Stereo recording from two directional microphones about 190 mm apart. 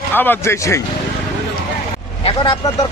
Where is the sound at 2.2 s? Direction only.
25° left (ahead or behind).